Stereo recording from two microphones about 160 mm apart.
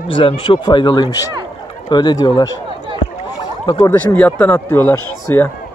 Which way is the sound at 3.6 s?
30° left (ahead or behind).